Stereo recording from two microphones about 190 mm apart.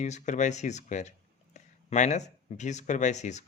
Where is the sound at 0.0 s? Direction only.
40° left (ahead or behind).